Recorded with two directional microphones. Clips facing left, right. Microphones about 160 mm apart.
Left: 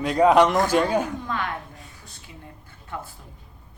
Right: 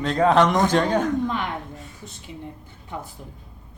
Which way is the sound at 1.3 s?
20° right (ahead or behind).